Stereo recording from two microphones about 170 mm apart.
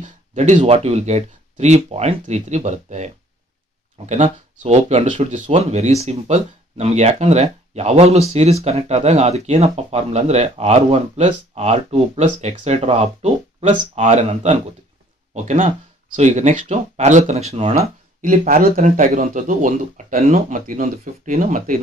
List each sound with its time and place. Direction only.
0.0 s speech: 45° right (ahead or behind)
18.2 s speech: 55° right (ahead or behind)